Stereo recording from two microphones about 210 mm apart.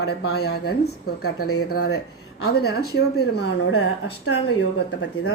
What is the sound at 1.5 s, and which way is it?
Speech, 90° left.